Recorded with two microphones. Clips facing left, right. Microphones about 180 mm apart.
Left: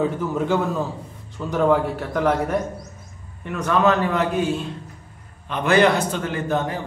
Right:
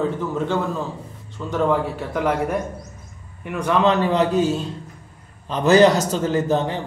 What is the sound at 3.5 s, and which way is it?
Speech, 20° right (ahead or behind).